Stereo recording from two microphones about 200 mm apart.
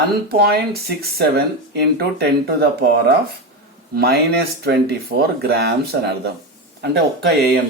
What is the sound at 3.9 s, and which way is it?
Speech, 50° right (ahead or behind).